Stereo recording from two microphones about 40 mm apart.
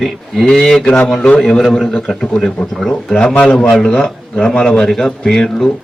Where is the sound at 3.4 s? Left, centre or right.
Left.